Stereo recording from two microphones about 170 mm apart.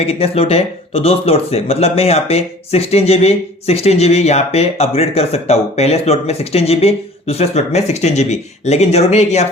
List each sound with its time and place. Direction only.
0.0 s speech: 35° left (ahead or behind)